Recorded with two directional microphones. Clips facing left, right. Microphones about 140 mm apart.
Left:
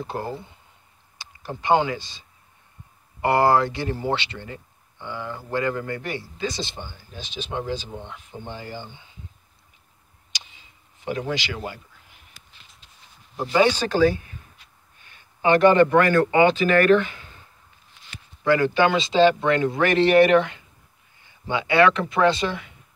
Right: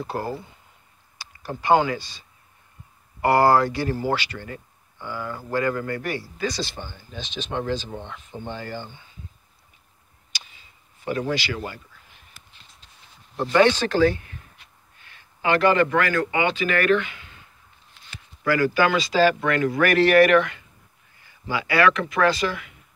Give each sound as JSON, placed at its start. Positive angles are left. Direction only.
{"t": 0.1, "sound": "a man's voice", "side_deg": 20}
{"t": 10.3, "sound": "a sound", "side_deg": 15}
{"t": 13.4, "sound": "speech", "side_deg": 10}
{"t": 15.4, "sound": "a man's voice", "side_deg": 25}
{"t": 18.4, "sound": "a man's voice", "side_deg": 25}